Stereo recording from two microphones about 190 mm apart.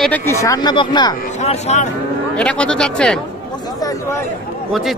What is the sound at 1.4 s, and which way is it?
Speech, 35° left (ahead or behind).